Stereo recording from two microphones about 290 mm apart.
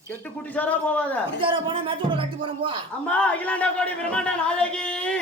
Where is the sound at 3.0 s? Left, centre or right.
Centre.